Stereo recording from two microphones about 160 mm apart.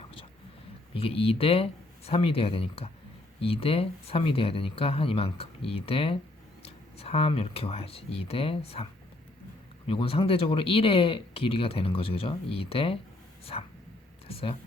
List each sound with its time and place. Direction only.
0.9 s speech: 35° left (ahead or behind)